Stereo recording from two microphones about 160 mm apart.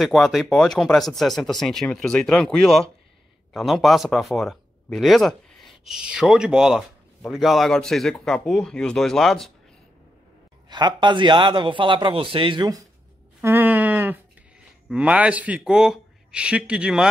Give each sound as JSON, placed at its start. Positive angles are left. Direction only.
{"t": 0.0, "sound": "speech", "side_deg": 0}
{"t": 10.7, "sound": "a man's voice", "side_deg": -30}
{"t": 13.4, "sound": "sheep", "side_deg": -10}
{"t": 14.9, "sound": "speech", "side_deg": -10}